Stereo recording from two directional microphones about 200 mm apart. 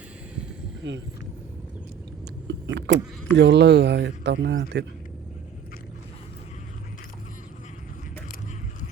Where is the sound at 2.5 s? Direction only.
60° right (ahead or behind).